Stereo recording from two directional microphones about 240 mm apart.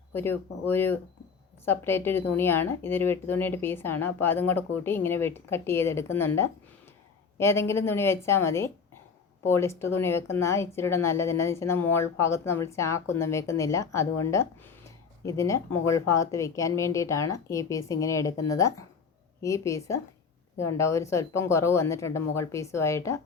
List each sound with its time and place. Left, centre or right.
0.1 s speech: centre